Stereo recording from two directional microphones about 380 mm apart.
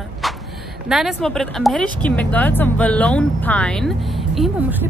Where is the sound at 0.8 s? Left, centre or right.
Centre.